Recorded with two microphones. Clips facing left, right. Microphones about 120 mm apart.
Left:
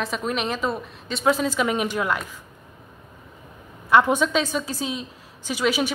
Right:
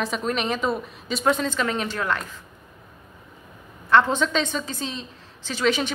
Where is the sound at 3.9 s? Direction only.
10° left (ahead or behind).